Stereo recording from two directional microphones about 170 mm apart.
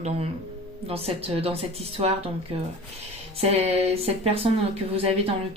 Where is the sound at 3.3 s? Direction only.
35° right (ahead or behind).